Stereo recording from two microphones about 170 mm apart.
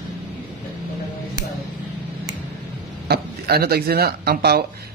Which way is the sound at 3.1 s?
65° right (ahead or behind).